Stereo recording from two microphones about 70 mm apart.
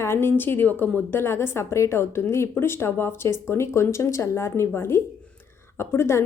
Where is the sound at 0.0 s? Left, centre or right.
Left.